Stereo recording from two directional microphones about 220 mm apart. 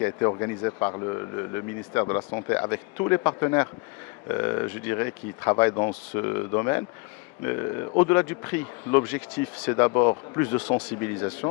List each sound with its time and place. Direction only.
0.0 s speech: 15° left (ahead or behind)
5.7 s speech: 25° left (ahead or behind)
6.1 s speech: 15° left (ahead or behind)